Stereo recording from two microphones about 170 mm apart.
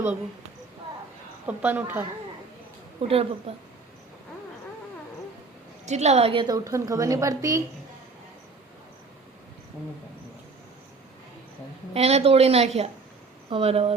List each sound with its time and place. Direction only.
1.5 s a woman's voice: 10° right (ahead or behind)
3.1 s a woman's voice: 35° right (ahead or behind)
5.8 s a woman's voice: 40° right (ahead or behind); by 7.6 s 20° right (ahead or behind)
11.9 s a woman's voice: 35° right (ahead or behind)